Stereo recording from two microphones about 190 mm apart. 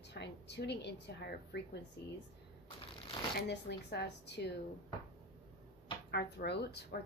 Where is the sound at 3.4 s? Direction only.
60° left (ahead or behind).